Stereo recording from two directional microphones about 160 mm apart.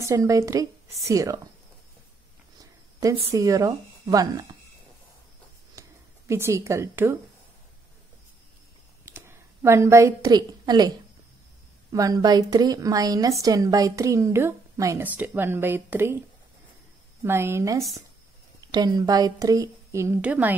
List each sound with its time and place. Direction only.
0.0 s a woman's voice: 20° right (ahead or behind)
3.0 s a woman's voice: 20° right (ahead or behind)
5.8 s a sound: 15° right (ahead or behind)
9.0 s a sound: 15° right (ahead or behind)
11.9 s a woman's voice: 20° right (ahead or behind)
17.2 s a woman's voice: 15° right (ahead or behind)